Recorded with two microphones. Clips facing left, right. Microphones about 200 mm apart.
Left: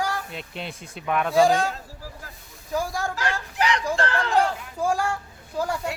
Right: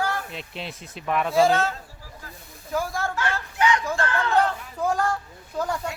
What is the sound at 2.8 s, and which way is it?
Speech, 15° left (ahead or behind).